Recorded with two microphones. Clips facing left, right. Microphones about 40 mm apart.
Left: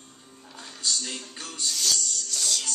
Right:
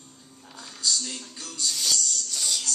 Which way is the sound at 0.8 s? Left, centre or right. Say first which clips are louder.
Right 1 dB; left.